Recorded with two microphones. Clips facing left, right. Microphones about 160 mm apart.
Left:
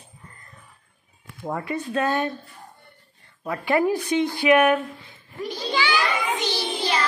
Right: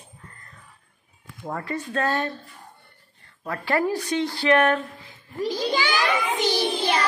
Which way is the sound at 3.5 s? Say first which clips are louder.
Left 3 dB; 15° left (ahead or behind).